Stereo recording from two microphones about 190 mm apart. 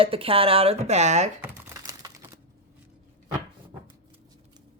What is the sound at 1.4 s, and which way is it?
Crumpling, 20° right (ahead or behind).